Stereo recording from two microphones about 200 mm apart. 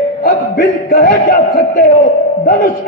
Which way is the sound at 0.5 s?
45° left (ahead or behind).